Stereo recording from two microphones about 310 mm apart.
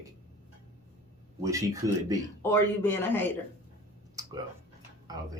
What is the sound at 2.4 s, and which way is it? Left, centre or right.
Speech, centre.